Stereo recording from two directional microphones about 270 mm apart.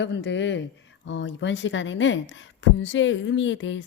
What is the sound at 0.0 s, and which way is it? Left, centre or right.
A woman's voice, left.